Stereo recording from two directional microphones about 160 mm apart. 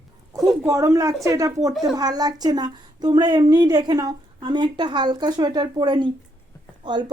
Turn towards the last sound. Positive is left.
turn(degrees=-25)  # may be behind; listen again after turning